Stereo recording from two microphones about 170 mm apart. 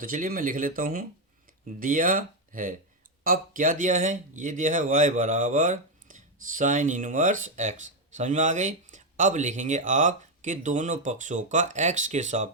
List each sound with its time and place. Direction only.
0.0 s speech: 55° right (ahead or behind)